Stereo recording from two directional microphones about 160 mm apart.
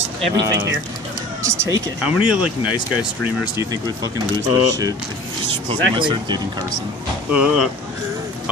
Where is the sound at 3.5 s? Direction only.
20° right (ahead or behind).